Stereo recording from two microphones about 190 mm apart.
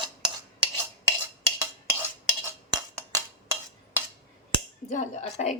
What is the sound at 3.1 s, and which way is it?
Dishes, 15° right (ahead or behind).